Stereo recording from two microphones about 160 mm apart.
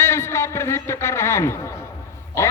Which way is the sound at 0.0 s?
15° left (ahead or behind).